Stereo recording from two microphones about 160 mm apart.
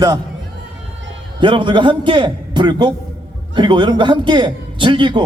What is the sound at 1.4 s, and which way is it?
A man's voice, 30° right (ahead or behind).